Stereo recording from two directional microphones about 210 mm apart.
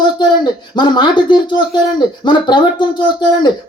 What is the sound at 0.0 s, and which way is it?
Speech, 20° left (ahead or behind).